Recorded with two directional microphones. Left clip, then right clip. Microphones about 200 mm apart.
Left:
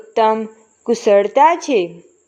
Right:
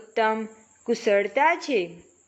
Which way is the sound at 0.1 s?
20° left (ahead or behind).